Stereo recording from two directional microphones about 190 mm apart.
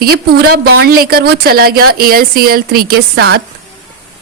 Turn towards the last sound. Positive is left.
turn(degrees=-55)  # may be behind; listen again after turning